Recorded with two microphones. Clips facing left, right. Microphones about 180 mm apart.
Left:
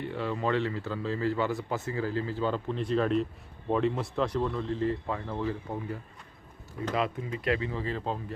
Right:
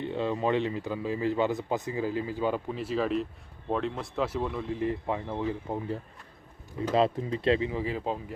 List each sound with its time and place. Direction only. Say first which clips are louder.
0.0 s speech: right 2 dB; 20° right (ahead or behind)